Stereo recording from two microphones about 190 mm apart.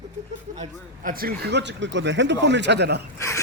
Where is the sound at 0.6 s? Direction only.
45° right (ahead or behind); by 3.0 s 60° right (ahead or behind).